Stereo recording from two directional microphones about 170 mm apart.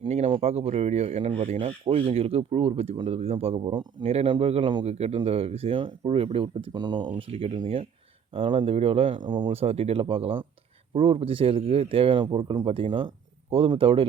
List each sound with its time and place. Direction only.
0.0 s speech: 35° right (ahead or behind)